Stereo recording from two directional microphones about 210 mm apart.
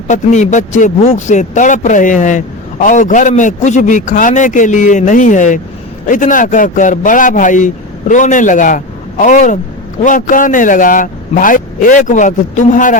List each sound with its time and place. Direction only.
0.1 s speech: 35° left (ahead or behind)